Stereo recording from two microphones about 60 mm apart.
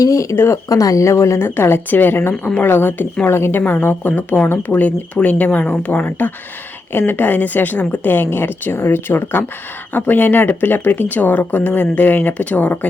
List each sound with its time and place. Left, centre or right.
0.0 s speech: left
0.7 s a woman's voice: left
4.4 s a woman's voice: left
4.8 s speech: left